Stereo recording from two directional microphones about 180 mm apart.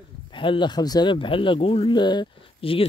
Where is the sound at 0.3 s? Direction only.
25° left (ahead or behind).